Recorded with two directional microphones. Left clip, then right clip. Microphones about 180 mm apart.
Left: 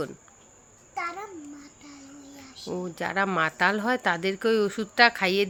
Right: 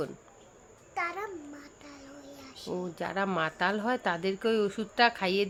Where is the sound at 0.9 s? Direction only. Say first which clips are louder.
Left 1 dB; 15° right (ahead or behind).